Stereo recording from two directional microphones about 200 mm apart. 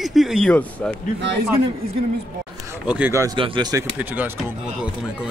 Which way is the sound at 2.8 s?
5° right (ahead or behind).